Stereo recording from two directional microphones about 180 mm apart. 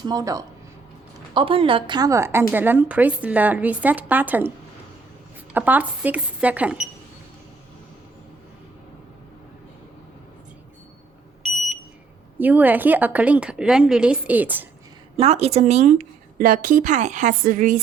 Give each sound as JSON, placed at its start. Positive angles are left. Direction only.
{"t": 0.0, "sound": "a woman's voice", "side_deg": -20}
{"t": 5.5, "sound": "a woman's voice", "side_deg": -10}
{"t": 12.4, "sound": "a woman's voice", "side_deg": -10}
{"t": 15.1, "sound": "a woman's voice", "side_deg": -35}